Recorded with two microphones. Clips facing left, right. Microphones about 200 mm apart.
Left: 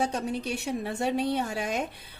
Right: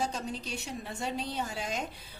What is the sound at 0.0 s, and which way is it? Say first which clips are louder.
Speech: left 6 dB; 60° left (ahead or behind).